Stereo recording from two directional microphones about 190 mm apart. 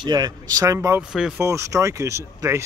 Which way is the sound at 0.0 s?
20° right (ahead or behind).